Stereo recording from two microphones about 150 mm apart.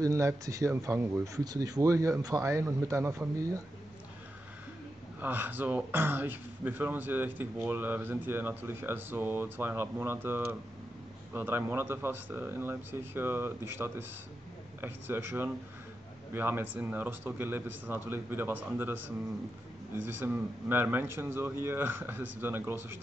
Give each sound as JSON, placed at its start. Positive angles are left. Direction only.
{"t": 0.0, "sound": "speech", "side_deg": -20}
{"t": 5.2, "sound": "a man's voice", "side_deg": -15}